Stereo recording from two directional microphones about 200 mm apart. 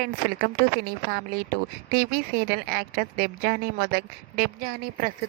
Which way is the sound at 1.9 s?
50° right (ahead or behind).